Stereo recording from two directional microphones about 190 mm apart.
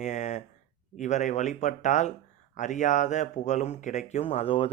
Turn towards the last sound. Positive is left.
turn(degrees=30)  # may be behind; listen again after turning